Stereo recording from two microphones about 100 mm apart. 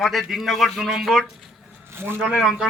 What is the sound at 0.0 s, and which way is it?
Speech, centre (ahead or behind).